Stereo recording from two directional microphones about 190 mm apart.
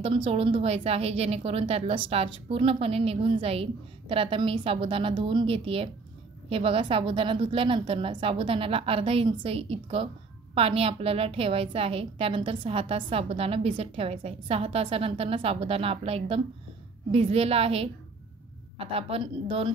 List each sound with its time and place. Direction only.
0.0 s a woman's voice: 30° right (ahead or behind)